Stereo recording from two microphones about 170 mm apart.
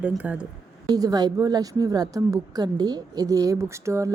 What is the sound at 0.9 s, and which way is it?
A woman's voice, 20° right (ahead or behind).